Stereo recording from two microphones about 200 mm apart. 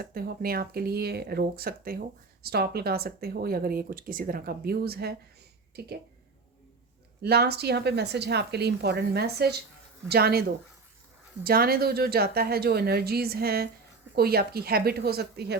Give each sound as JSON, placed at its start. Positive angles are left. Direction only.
{"t": 0.0, "sound": "speech", "side_deg": -50}
{"t": 7.2, "sound": "a woman's voice", "side_deg": -50}
{"t": 11.4, "sound": "speech", "side_deg": -50}